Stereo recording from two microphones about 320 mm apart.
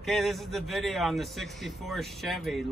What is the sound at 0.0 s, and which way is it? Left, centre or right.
Speech, centre.